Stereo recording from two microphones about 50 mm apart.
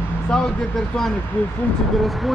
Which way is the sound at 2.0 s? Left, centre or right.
Centre.